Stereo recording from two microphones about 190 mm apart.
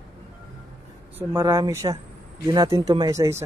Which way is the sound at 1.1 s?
15° right (ahead or behind).